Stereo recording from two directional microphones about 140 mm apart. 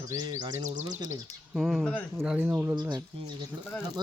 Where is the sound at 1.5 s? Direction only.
Centre (ahead or behind).